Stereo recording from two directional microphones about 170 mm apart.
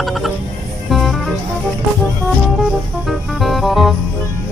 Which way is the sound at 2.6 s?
Centre (ahead or behind).